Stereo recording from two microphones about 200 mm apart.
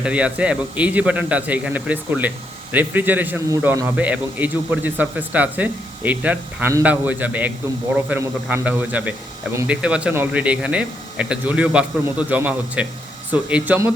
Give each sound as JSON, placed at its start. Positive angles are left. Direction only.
{"t": 0.0, "sound": "a man's voice", "side_deg": -5}